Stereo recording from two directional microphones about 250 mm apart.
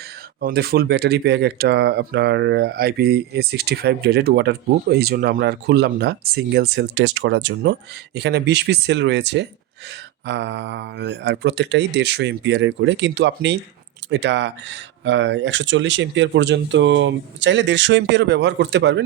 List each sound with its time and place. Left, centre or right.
0.3 s speech: right